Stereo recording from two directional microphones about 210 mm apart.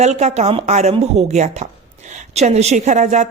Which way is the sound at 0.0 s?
30° right (ahead or behind).